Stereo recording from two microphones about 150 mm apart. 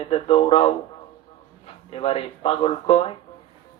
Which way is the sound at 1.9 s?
40° left (ahead or behind).